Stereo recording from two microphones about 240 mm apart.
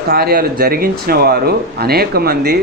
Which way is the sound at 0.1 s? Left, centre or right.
Right.